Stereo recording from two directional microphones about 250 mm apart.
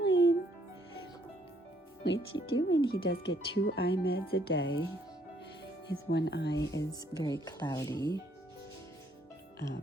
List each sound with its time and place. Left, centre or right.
0.0 s music: left
2.0 s speech: left
2.8 s speech: centre
3.1 s speech: left
6.1 s speech: left
6.7 s speech: centre